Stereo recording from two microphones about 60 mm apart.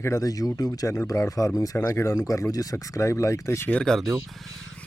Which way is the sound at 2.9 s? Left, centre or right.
Left.